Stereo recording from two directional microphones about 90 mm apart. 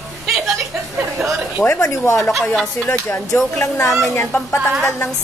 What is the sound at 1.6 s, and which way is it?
Speech, 25° left (ahead or behind).